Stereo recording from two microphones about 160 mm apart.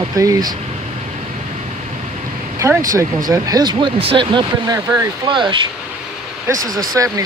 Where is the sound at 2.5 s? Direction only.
20° right (ahead or behind).